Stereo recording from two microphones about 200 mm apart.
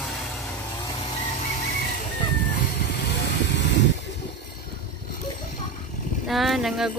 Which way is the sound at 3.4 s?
60° left (ahead or behind).